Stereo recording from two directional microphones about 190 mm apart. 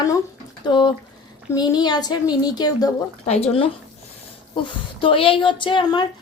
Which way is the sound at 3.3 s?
30° left (ahead or behind).